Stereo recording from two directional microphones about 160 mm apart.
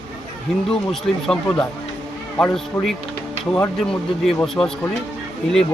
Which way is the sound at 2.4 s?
5° left (ahead or behind).